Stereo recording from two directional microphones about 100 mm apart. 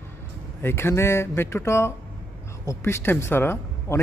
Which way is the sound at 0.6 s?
25° left (ahead or behind).